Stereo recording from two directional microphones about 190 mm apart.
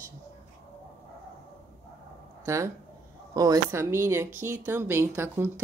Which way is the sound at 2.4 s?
15° right (ahead or behind).